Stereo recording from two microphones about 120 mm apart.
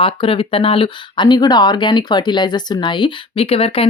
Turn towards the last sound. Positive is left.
turn(degrees=55)  # may be behind; listen again after turning